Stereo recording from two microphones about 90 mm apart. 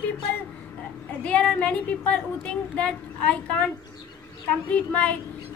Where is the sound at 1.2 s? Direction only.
10° left (ahead or behind).